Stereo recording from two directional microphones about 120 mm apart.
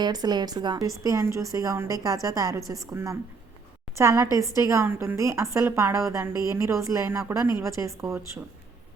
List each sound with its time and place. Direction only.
0.0 s speech: 35° right (ahead or behind)
1.0 s a woman's voice: 25° right (ahead or behind)